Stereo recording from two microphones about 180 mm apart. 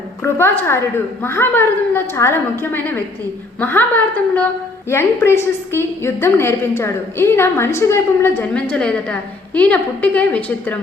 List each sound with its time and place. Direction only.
0.2 s a woman's voice: 10° left (ahead or behind)